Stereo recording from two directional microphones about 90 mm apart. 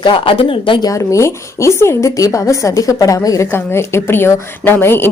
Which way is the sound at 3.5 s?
25° left (ahead or behind).